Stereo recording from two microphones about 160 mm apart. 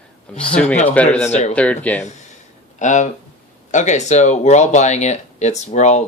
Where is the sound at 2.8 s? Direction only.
50° left (ahead or behind).